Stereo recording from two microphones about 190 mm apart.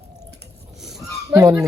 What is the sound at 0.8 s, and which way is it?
Goose, centre (ahead or behind).